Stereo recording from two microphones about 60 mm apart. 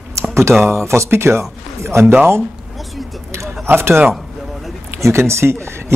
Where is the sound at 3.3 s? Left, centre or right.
Right.